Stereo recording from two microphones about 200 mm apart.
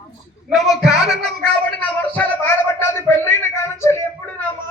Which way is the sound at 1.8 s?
10° left (ahead or behind).